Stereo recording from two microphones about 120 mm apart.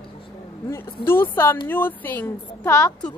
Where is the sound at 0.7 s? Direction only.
20° left (ahead or behind).